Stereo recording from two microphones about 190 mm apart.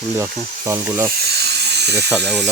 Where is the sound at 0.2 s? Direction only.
15° right (ahead or behind).